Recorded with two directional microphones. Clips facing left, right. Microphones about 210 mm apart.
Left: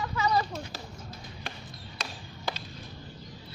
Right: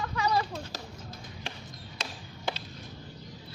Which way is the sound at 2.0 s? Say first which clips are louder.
Even; 25° right (ahead or behind).